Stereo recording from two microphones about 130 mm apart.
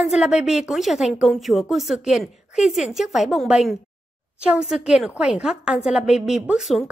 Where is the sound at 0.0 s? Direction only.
5° right (ahead or behind).